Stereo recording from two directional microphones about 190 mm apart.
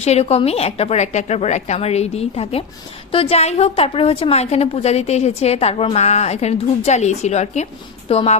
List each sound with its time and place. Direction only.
0.0 s a woman's voice: 35° left (ahead or behind)